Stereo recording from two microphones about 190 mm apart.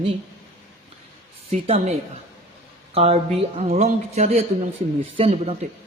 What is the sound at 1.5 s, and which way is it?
A woman's voice, 30° right (ahead or behind).